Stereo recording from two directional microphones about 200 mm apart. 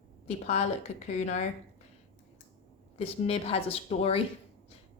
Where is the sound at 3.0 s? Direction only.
30° left (ahead or behind).